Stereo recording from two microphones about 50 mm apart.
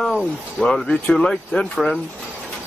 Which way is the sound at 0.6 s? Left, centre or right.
Centre.